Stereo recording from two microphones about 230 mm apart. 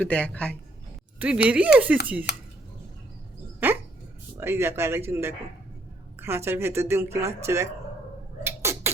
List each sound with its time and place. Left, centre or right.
0.0 s speech: centre
1.2 s speech: centre
2.3 s speech: left
4.4 s speech: centre
8.4 s cat: centre